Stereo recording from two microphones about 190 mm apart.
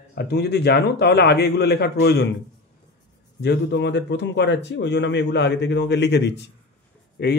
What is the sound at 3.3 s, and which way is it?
Speech, 65° left (ahead or behind).